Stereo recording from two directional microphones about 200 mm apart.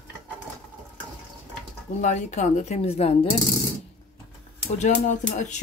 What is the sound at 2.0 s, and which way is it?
Speech, 40° left (ahead or behind).